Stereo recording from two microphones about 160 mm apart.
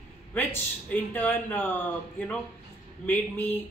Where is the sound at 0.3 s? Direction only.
10° left (ahead or behind).